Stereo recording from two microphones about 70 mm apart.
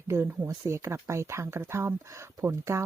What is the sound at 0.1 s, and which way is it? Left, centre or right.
Speech, right.